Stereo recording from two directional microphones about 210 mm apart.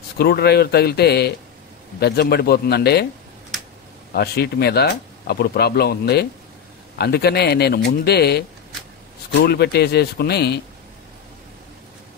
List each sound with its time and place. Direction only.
0.2 s speech: 50° left (ahead or behind)
4.1 s speech: 50° left (ahead or behind)